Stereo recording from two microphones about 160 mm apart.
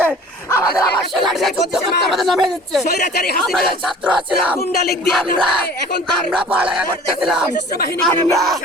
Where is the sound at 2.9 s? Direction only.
80° left.